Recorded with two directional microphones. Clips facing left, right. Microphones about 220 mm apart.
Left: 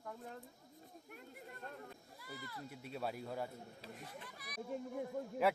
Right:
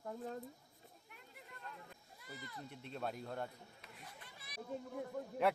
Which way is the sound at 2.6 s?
5° left (ahead or behind).